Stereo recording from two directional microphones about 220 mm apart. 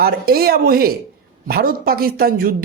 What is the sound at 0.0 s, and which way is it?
Speech, 45° right (ahead or behind).